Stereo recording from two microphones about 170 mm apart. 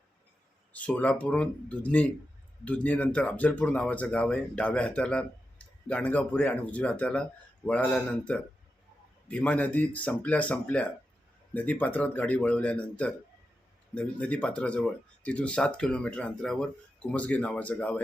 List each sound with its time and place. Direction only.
0.7 s speech: 10° left (ahead or behind)